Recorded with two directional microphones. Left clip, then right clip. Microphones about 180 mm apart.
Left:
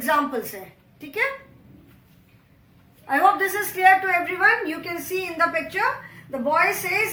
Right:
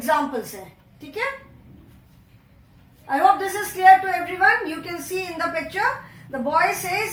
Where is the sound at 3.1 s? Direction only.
25° left (ahead or behind).